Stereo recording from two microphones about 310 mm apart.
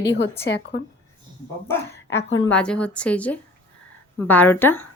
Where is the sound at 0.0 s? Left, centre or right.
Left.